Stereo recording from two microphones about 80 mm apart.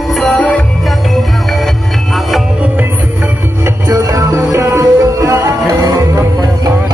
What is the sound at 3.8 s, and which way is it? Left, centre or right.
Music, right.